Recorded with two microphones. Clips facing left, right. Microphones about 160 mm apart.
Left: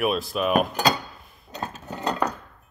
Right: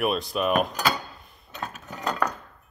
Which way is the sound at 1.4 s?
30° left (ahead or behind).